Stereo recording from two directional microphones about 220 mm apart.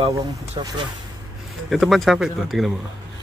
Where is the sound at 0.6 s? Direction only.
15° right (ahead or behind).